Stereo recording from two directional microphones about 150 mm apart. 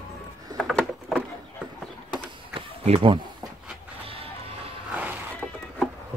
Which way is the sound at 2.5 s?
35° right (ahead or behind).